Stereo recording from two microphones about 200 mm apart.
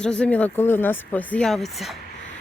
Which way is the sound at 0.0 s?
5° left (ahead or behind).